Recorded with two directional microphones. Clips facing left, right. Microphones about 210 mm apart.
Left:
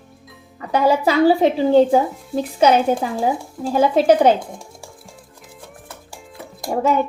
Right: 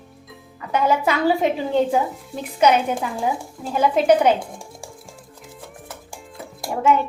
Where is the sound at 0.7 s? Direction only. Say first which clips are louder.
Left 3 dB; 35° left (ahead or behind).